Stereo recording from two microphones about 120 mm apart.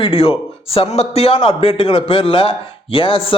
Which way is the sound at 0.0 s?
50° left (ahead or behind).